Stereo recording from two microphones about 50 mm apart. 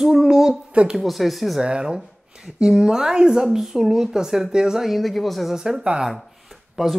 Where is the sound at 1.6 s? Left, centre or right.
Centre.